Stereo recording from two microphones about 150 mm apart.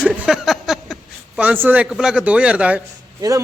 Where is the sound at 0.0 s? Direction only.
Centre (ahead or behind).